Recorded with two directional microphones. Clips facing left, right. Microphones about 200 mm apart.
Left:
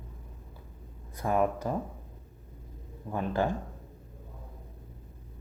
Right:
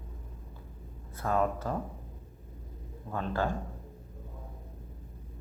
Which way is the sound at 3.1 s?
15° left (ahead or behind).